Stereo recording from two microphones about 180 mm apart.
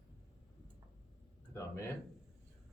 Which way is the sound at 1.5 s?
15° left (ahead or behind).